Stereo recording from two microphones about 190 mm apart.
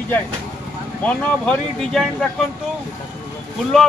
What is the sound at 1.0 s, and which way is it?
Speech, 5° left (ahead or behind).